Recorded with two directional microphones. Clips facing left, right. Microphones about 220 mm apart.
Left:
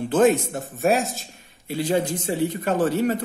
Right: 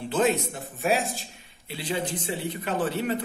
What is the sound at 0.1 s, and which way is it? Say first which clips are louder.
Speech: left 6 dB; 50° left (ahead or behind).